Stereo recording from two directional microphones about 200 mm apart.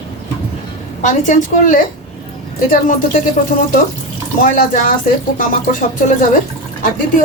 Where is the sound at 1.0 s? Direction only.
40° left (ahead or behind).